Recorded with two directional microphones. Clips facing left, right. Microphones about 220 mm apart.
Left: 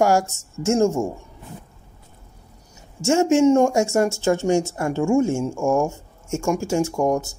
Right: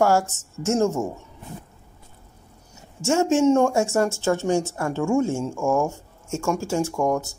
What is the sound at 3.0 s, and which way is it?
Speech, 10° left (ahead or behind).